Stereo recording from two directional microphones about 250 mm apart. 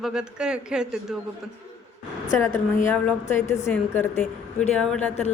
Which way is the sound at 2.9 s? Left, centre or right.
Centre.